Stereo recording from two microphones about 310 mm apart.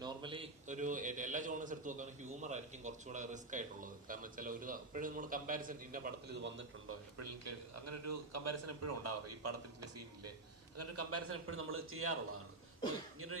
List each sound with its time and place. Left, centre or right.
0.0 s a man's voice: centre
6.4 s a man's voice: right
7.2 s a man's voice: right